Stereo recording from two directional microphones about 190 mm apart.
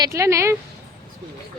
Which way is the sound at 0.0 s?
15° right (ahead or behind).